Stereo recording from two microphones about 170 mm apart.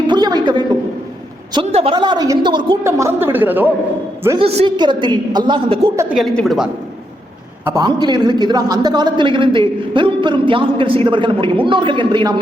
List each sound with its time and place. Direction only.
0.1 s a sound: 25° right (ahead or behind)
1.5 s a man's voice: 30° right (ahead or behind)
2.8 s a woman's voice: 15° right (ahead or behind)
4.4 s a man's voice: 35° right (ahead or behind)
6.1 s a woman's voice: centre (ahead or behind)
7.6 s a man's voice: 20° right (ahead or behind)